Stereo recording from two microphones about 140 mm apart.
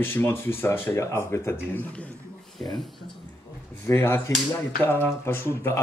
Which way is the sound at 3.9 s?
15° left (ahead or behind).